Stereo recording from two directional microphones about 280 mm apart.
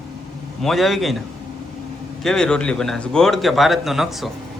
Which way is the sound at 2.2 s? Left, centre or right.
Centre.